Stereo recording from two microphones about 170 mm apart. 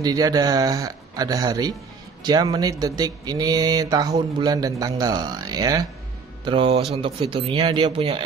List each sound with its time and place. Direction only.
0.0 s a man's voice: 20° right (ahead or behind)